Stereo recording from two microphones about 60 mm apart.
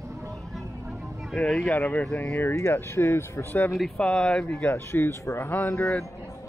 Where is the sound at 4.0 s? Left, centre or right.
Centre.